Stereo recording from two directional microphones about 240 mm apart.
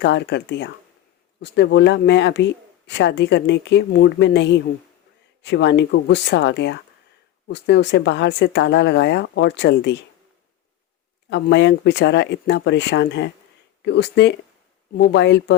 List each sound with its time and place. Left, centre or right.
0.0 s speech: left
11.3 s speech: left